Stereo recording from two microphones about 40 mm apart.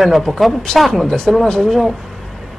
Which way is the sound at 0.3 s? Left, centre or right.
Centre.